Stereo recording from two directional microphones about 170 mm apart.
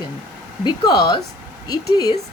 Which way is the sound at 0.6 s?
25° left (ahead or behind).